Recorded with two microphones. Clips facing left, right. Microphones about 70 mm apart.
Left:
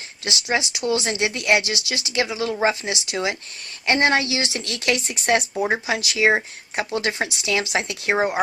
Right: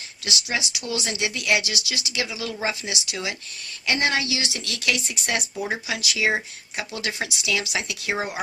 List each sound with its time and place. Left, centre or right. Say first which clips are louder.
0.3 s speech: left 4 dB; left